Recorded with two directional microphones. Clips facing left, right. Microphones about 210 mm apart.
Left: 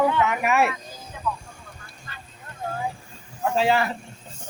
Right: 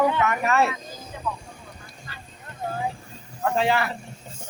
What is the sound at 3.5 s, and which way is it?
Speech, 25° left (ahead or behind).